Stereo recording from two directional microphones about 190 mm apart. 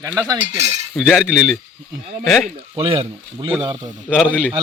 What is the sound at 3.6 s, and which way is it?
Speech, 25° right (ahead or behind).